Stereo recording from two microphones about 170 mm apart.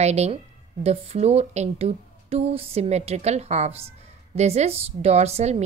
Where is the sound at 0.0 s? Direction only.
40° right (ahead or behind).